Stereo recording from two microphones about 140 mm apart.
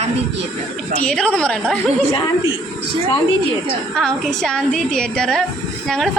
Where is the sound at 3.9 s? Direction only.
5° left (ahead or behind).